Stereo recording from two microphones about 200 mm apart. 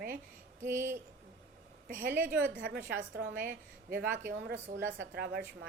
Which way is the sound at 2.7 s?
50° right (ahead or behind).